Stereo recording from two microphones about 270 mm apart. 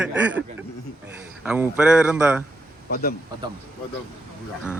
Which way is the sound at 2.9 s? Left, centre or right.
Left.